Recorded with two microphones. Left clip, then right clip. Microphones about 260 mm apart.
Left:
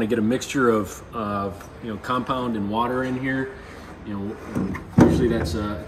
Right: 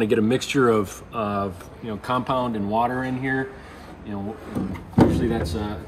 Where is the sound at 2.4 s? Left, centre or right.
Centre.